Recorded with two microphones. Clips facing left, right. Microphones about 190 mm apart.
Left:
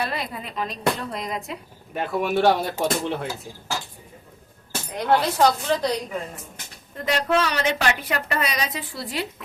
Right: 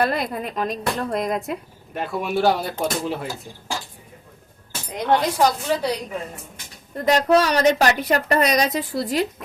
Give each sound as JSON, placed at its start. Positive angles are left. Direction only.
{"t": 0.0, "sound": "speech", "side_deg": -50}
{"t": 1.9, "sound": "speech", "side_deg": 0}
{"t": 4.9, "sound": "a woman's voice", "side_deg": -15}
{"t": 6.9, "sound": "a woman's voice", "side_deg": -40}